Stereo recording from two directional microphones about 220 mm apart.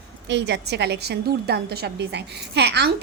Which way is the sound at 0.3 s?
50° right (ahead or behind).